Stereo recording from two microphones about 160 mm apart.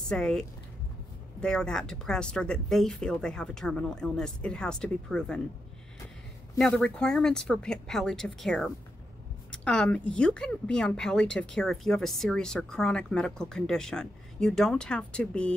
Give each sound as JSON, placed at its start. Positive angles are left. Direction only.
{"t": 0.1, "sound": "speech", "side_deg": 5}
{"t": 6.6, "sound": "speech", "side_deg": 5}